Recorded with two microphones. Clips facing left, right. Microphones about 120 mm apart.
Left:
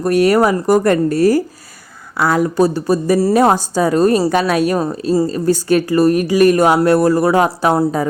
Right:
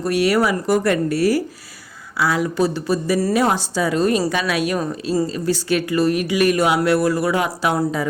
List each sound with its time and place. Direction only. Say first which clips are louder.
0.0 s speech: left 5 dB; 45° left (ahead or behind)